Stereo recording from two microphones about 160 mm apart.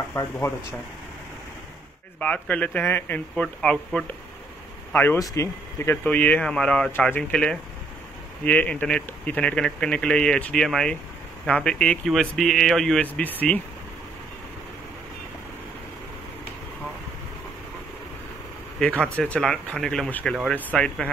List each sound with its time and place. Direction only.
0.1 s speech: 15° left (ahead or behind)
2.1 s speech: 10° left (ahead or behind)
18.8 s speech: 5° left (ahead or behind)